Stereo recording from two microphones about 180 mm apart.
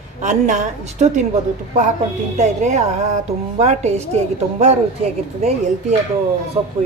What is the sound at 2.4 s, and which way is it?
A woman's voice, 40° right (ahead or behind).